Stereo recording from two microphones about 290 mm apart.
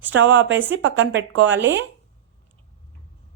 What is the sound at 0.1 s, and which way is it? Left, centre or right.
A woman's voice, right.